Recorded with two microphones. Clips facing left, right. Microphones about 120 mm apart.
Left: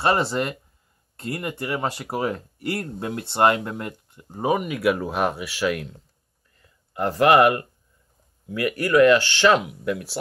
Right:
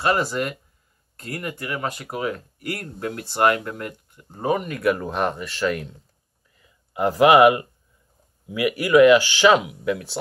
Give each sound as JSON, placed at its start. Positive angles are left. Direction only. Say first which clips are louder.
{"t": 0.0, "sound": "speech", "louder": "left 1 dB", "side_deg": 25}
{"t": 4.3, "sound": "speech", "louder": "left 1 dB", "side_deg": 10}
{"t": 6.5, "sound": "a sound", "louder": "right 3 dB", "side_deg": -5}
{"t": 8.5, "sound": "speech", "louder": "right 2 dB", "side_deg": -10}